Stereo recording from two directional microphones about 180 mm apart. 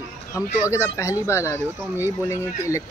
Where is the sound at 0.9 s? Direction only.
15° left (ahead or behind).